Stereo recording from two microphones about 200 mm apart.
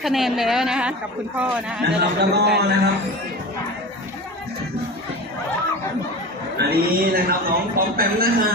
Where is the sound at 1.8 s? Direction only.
55° right (ahead or behind).